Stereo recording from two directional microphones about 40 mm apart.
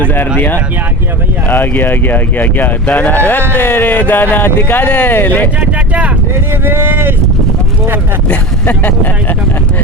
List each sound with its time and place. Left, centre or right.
0.0 s speech: left
5.5 s speech: right
6.7 s speech: right